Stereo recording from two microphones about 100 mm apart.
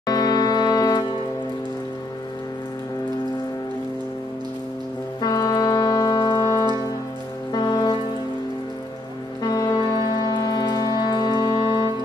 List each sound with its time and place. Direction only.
0.0 s music: 40° left (ahead or behind)
5.2 s music: 45° left (ahead or behind)
7.5 s music: 45° left (ahead or behind)
9.4 s music: 40° left (ahead or behind)